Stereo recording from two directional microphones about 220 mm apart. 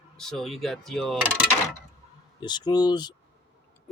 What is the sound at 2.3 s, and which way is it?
Speech, 20° left (ahead or behind).